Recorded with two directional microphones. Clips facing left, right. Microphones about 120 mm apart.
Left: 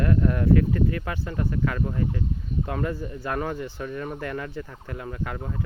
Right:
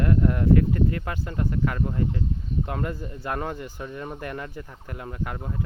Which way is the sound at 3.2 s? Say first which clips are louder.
Left 1 dB; 25° right (ahead or behind).